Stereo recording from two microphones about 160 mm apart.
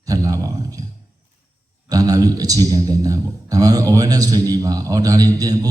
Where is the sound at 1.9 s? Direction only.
25° right (ahead or behind).